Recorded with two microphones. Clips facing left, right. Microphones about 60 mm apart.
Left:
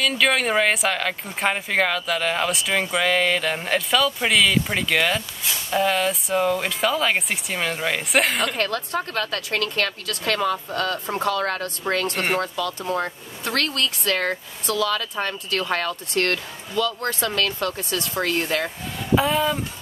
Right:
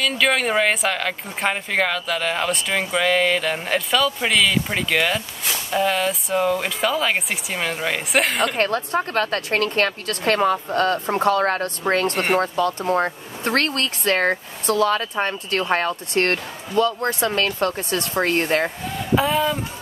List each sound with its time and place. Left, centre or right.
0.0 s speech: centre
8.5 s speech: right
19.1 s speech: centre